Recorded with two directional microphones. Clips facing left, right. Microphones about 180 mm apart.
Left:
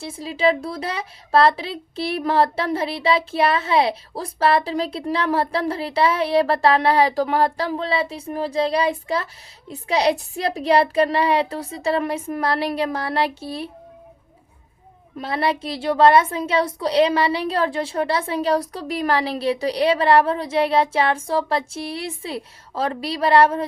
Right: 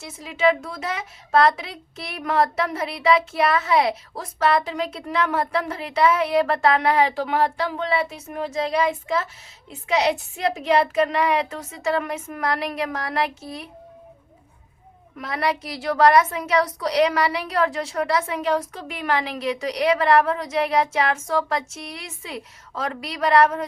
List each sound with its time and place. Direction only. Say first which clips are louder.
0.0 s speech: left 1 dB; 30° left (ahead or behind)
15.2 s a woman's voice: left 2 dB; 30° left (ahead or behind)